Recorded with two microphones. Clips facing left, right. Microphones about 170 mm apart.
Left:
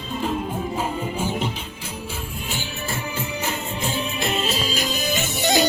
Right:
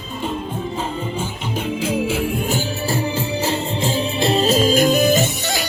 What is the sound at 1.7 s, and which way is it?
Music, 90° right.